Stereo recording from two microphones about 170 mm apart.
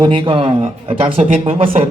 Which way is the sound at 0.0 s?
30° right (ahead or behind).